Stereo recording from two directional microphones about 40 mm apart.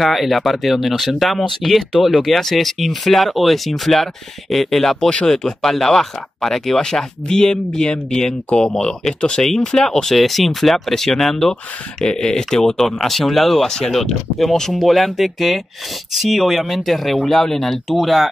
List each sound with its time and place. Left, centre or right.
0.0 s speech: centre
5.1 s speech: left
12.0 s speech: left; by 18.3 s centre